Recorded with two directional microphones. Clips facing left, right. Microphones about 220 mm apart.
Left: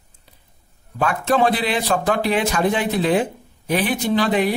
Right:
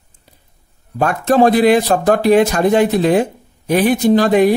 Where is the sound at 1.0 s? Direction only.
45° right (ahead or behind).